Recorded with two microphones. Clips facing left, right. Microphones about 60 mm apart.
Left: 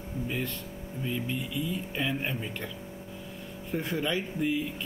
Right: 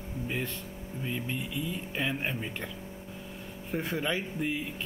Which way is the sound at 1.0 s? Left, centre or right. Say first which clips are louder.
Left 2 dB; centre.